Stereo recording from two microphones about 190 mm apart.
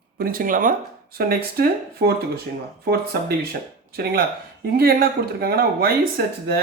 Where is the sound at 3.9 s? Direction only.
55° right (ahead or behind).